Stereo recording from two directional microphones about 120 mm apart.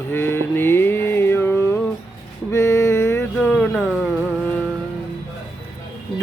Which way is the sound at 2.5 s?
25° left (ahead or behind).